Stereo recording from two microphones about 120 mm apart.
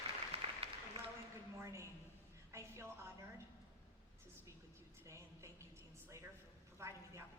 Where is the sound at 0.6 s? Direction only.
55° right (ahead or behind).